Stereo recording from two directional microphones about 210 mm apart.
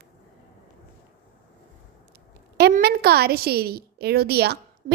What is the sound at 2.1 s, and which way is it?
A woman's voice, 50° right (ahead or behind).